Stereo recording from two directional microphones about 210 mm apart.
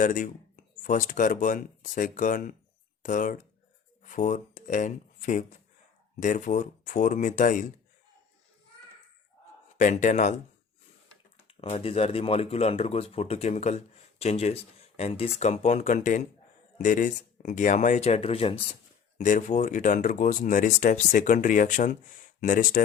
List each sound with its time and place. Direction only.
0.0 s speech: 40° left (ahead or behind)
9.7 s speech: 35° left (ahead or behind)
11.4 s speech: 25° left (ahead or behind)